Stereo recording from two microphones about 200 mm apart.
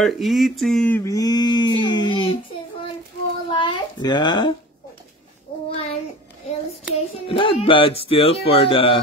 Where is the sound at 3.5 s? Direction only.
25° left (ahead or behind).